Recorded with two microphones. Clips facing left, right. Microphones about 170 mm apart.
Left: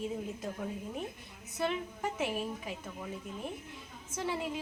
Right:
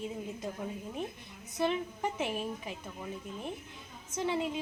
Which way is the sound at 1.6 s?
5° left (ahead or behind).